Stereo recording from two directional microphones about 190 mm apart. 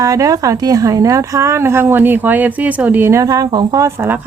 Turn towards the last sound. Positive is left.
turn(degrees=-10)  # may be behind; listen again after turning